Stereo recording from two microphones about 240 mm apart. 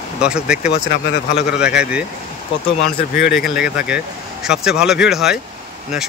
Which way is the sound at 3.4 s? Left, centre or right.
Left.